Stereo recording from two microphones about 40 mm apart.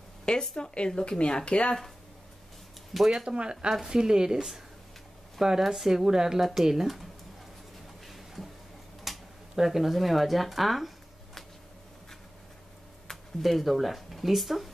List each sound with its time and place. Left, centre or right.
0.2 s speech: left
2.9 s speech: centre
3.3 s speech: right; by 7.1 s centre
9.0 s speech: centre
13.4 s speech: centre